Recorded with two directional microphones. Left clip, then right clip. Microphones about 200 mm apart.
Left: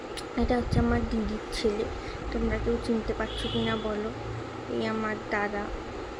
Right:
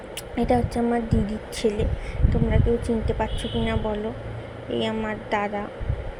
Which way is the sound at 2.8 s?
20° right (ahead or behind).